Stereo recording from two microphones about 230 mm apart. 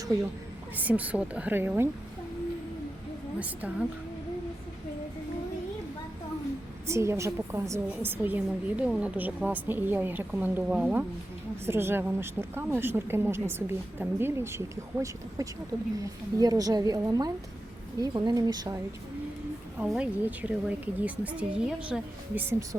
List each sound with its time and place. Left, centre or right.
0.8 s a woman's voice: centre
6.8 s a woman's voice: centre
19.8 s speech: centre